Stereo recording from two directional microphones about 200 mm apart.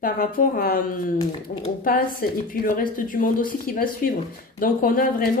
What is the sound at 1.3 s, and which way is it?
Speech, 30° left (ahead or behind).